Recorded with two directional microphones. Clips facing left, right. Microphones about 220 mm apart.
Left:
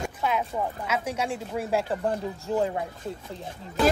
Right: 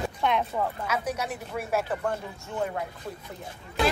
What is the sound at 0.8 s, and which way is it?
Speech, 25° left (ahead or behind).